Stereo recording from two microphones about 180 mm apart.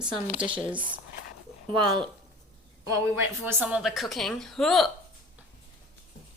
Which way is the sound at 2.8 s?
15° right (ahead or behind).